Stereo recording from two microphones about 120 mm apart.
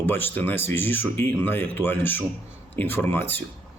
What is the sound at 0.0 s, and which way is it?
Speech, 15° left (ahead or behind).